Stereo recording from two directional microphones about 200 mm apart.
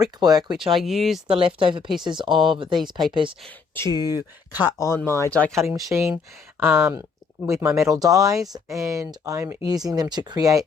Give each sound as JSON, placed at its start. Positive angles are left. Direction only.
{"t": 0.0, "sound": "speech", "side_deg": -20}
{"t": 0.7, "sound": "speech", "side_deg": 0}
{"t": 1.3, "sound": "speech", "side_deg": -25}
{"t": 3.8, "sound": "speech", "side_deg": 20}
{"t": 5.7, "sound": "speech", "side_deg": -15}